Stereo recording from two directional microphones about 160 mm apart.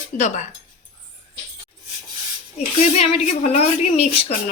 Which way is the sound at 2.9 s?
45° left (ahead or behind).